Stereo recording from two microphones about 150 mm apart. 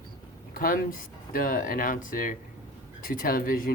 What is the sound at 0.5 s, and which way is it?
Speech, 70° left (ahead or behind).